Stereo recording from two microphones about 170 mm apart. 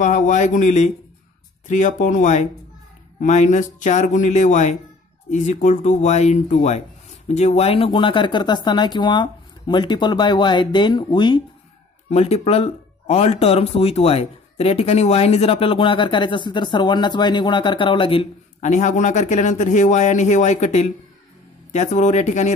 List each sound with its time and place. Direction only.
0.0 s speech: 45° left (ahead or behind)